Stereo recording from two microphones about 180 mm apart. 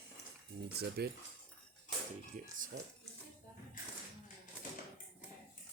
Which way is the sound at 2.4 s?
45° right (ahead or behind).